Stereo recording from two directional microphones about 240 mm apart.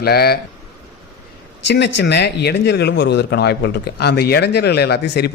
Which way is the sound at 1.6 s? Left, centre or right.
Left.